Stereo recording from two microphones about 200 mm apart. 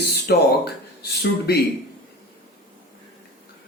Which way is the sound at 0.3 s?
55° left (ahead or behind).